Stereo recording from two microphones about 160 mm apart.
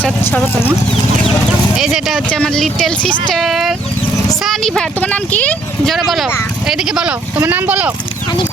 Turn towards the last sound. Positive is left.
turn(degrees=-10)  # may be behind; listen again after turning